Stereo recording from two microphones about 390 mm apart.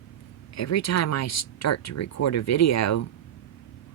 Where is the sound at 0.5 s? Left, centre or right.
Left.